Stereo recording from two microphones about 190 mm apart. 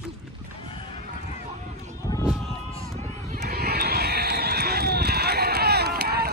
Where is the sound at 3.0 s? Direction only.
15° left (ahead or behind).